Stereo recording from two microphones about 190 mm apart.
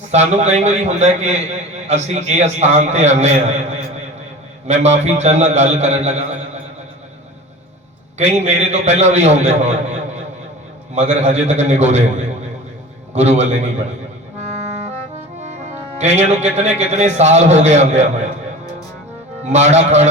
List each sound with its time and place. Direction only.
0.1 s a man's voice: 35° right (ahead or behind)
4.7 s a man's voice: 35° right (ahead or behind)
8.2 s a man's voice: 35° right (ahead or behind)
10.9 s a man's voice: 35° right (ahead or behind)
15.4 s speech: 35° right (ahead or behind)
19.5 s a man's voice: 35° right (ahead or behind)